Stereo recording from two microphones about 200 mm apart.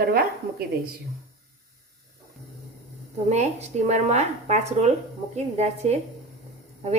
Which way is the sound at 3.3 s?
35° right (ahead or behind).